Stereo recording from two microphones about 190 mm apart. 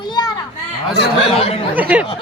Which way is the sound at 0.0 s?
20° left (ahead or behind).